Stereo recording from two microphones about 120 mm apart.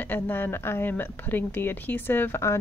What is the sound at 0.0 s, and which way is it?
Speech, 15° left (ahead or behind).